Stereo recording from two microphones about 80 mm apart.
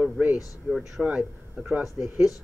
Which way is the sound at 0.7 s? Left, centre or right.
Centre.